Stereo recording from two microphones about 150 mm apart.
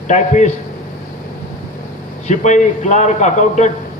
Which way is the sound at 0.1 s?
50° left (ahead or behind).